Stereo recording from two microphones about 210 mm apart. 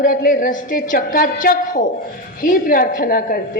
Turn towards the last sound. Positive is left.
turn(degrees=45)  # may be behind; listen again after turning